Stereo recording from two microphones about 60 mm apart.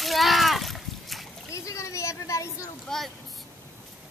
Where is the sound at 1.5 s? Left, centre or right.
Left.